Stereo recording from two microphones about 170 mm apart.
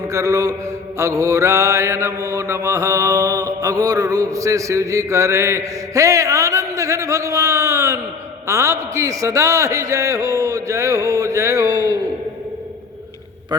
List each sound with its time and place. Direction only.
0.1 s mantra: 20° right (ahead or behind)
13.5 s mantra: 25° right (ahead or behind)